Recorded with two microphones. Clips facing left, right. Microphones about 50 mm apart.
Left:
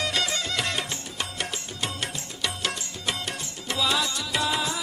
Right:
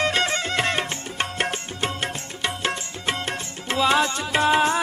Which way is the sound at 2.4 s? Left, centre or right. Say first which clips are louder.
Right 4 dB; right.